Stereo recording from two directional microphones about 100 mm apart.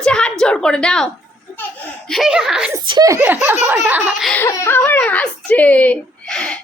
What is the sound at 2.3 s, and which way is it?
Speech, 10° right (ahead or behind).